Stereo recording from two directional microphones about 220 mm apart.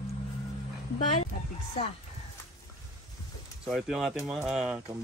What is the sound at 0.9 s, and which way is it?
Speech, 30° left (ahead or behind).